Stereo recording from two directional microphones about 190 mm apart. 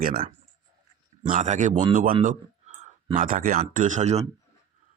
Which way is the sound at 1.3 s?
40° right (ahead or behind).